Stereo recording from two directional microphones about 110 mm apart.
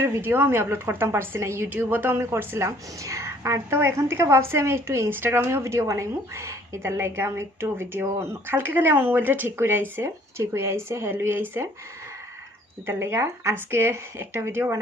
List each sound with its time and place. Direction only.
0.0 s a woman's voice: 20° right (ahead or behind)
12.8 s a woman's voice: 20° right (ahead or behind)